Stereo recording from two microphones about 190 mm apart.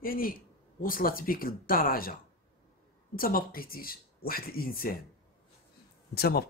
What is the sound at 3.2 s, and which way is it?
Speech, 50° left (ahead or behind).